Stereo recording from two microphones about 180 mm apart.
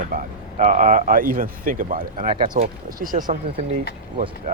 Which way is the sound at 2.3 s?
25° right (ahead or behind).